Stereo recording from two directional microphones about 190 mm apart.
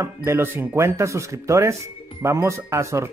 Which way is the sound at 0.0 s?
15° right (ahead or behind).